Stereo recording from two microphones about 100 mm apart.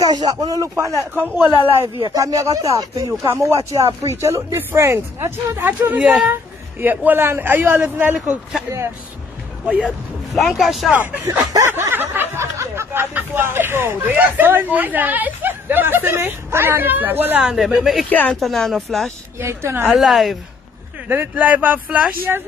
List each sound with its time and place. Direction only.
0.0 s speech: 45° right (ahead or behind)
1.1 s speech: 20° right (ahead or behind)
2.1 s speech: 35° right (ahead or behind); by 8.4 s 15° right (ahead or behind)
9.7 s speech: 10° right (ahead or behind)
10.3 s speech: centre (ahead or behind)
11.3 s speech: 35° right (ahead or behind)
11.7 s speech: 20° right (ahead or behind)
17.5 s speech: 5° right (ahead or behind)
18.1 s speech: 15° left (ahead or behind)
18.4 s speech: centre (ahead or behind)
19.0 s speech: 25° right (ahead or behind)
19.9 s speech: centre (ahead or behind)
21.1 s speech: 15° right (ahead or behind)